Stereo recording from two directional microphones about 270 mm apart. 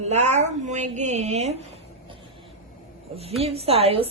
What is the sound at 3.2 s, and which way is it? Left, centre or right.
Speech, right.